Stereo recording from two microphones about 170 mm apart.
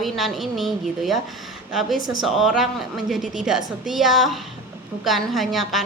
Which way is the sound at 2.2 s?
Centre (ahead or behind).